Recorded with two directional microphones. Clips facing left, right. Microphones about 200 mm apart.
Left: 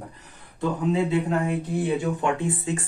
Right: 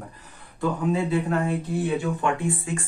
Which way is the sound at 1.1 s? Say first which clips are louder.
Even; 20° left (ahead or behind).